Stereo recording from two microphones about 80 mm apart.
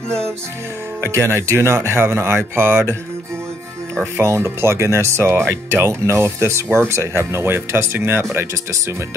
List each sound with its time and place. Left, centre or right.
1.0 s speech: right
4.2 s speech: right